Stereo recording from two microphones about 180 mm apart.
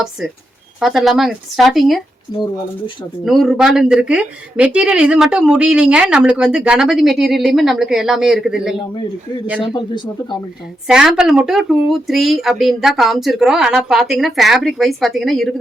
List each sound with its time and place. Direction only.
0.8 s speech: centre (ahead or behind)
2.3 s speech: 25° left (ahead or behind)
3.2 s speech: centre (ahead or behind)
9.7 s speech: 25° left (ahead or behind)
10.8 s speech: 5° right (ahead or behind)